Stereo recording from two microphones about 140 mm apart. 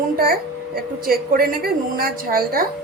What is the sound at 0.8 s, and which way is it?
A woman's voice, 90° right.